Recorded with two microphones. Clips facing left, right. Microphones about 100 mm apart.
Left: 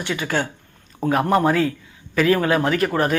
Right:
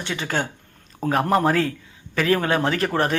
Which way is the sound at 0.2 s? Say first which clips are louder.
Left 1 dB; 40° right (ahead or behind).